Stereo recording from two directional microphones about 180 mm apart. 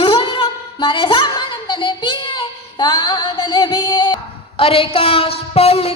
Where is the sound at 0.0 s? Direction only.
30° left (ahead or behind).